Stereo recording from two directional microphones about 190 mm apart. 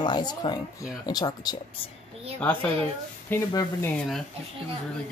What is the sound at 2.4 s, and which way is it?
A woman's voice, 10° left (ahead or behind).